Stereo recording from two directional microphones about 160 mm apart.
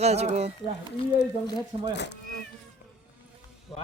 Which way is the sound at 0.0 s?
40° right (ahead or behind).